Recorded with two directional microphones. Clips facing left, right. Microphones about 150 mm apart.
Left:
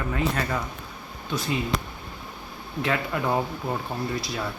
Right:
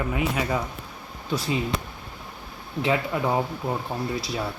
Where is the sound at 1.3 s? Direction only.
35° right (ahead or behind).